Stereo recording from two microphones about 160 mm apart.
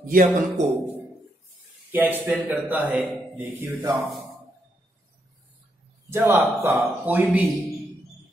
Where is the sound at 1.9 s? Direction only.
10° right (ahead or behind).